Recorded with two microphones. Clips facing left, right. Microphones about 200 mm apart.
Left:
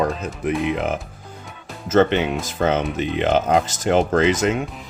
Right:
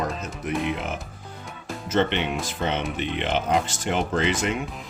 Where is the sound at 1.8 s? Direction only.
45° left (ahead or behind).